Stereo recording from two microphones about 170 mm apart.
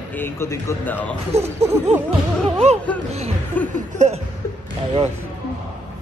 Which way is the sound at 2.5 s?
40° right (ahead or behind).